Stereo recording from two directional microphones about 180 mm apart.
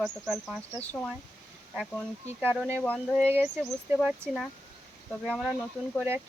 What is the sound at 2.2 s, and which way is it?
Speech, 10° right (ahead or behind).